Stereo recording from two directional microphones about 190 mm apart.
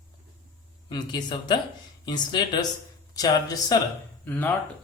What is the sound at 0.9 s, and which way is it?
Speech, 20° left (ahead or behind).